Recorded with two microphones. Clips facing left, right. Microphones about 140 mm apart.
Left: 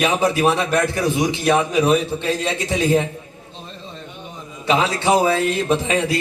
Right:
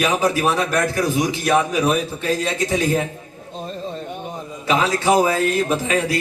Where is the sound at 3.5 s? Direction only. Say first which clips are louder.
Right 9 dB; 40° right (ahead or behind).